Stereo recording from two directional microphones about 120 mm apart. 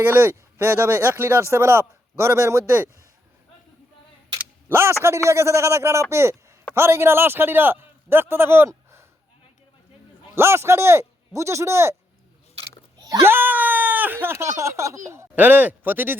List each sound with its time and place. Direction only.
0.0 s speech: 20° right (ahead or behind)
4.4 s camera: 20° right (ahead or behind)
5.0 s a man's voice: 25° right (ahead or behind)
10.3 s speech: 20° right (ahead or behind)
13.0 s a sound: 30° right (ahead or behind)
13.2 s a sound: 20° right (ahead or behind)
15.1 s speech: 20° right (ahead or behind)